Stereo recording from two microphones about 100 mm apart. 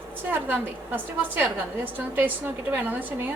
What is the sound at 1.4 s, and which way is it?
Speech, 20° right (ahead or behind).